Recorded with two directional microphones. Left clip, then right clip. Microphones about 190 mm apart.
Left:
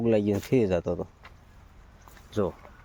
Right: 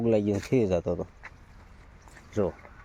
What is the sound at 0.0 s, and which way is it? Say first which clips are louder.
Speech: left 1 dB; 5° left (ahead or behind).